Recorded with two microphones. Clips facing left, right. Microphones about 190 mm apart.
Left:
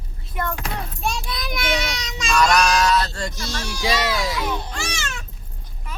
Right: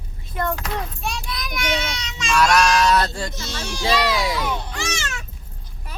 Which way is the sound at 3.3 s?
20° right (ahead or behind).